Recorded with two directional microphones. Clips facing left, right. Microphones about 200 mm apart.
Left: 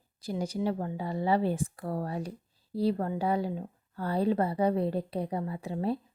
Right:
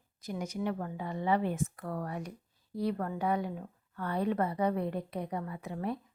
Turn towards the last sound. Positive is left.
turn(degrees=30)  # may be behind; listen again after turning